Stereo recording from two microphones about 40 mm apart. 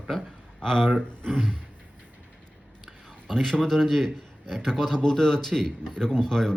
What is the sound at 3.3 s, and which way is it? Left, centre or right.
A man's voice, centre.